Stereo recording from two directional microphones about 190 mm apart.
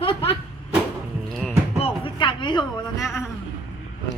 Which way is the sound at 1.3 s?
Centre (ahead or behind).